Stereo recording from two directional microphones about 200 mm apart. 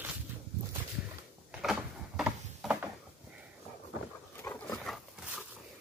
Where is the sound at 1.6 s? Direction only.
Centre (ahead or behind).